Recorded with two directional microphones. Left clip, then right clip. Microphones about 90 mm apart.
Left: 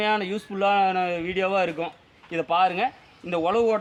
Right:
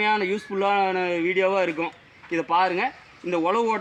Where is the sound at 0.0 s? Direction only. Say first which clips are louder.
Right 2 dB; 45° left (ahead or behind).